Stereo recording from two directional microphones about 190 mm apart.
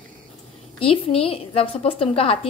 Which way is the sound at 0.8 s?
30° left (ahead or behind).